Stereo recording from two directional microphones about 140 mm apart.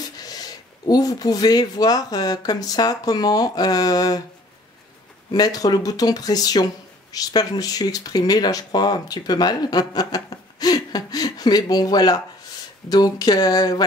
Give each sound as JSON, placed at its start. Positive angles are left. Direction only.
{"t": 0.2, "sound": "speech", "side_deg": 25}
{"t": 5.3, "sound": "speech", "side_deg": 25}